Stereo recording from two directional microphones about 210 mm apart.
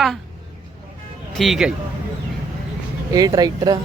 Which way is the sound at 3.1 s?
20° right (ahead or behind).